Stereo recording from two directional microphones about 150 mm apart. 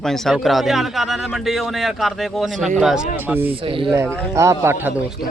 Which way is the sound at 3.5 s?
35° right (ahead or behind).